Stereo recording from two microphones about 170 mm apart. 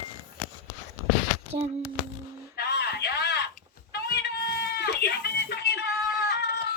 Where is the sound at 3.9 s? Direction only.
70° left (ahead or behind).